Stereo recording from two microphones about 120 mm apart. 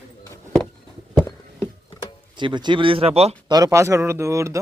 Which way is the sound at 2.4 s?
40° right (ahead or behind).